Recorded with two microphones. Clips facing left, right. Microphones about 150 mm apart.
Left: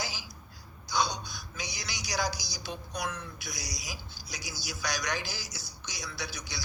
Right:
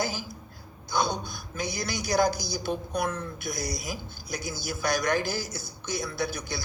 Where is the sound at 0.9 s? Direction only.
50° right (ahead or behind).